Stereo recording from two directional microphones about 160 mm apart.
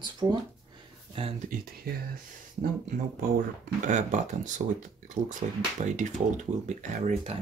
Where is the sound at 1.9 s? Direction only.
70° right (ahead or behind).